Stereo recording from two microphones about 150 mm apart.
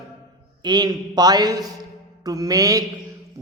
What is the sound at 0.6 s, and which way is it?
A man's voice, 30° right (ahead or behind).